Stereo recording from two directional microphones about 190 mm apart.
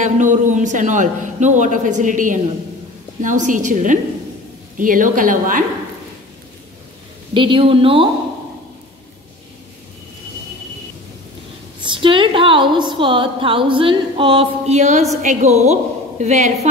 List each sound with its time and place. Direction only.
0.0 s a man's voice: 40° right (ahead or behind)
7.3 s a woman's voice: 25° right (ahead or behind)
11.8 s a woman's voice: 25° right (ahead or behind)